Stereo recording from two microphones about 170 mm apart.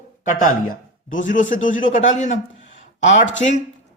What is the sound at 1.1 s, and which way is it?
A man's voice, 50° left (ahead or behind).